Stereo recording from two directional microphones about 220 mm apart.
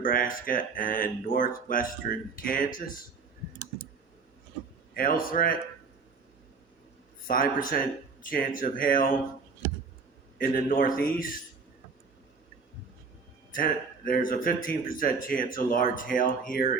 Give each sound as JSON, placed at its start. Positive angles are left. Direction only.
{"t": 0.0, "sound": "speech", "side_deg": 40}
{"t": 4.9, "sound": "speech", "side_deg": 40}
{"t": 7.3, "sound": "speech", "side_deg": 40}
{"t": 10.3, "sound": "speech", "side_deg": 40}
{"t": 13.5, "sound": "speech", "side_deg": 40}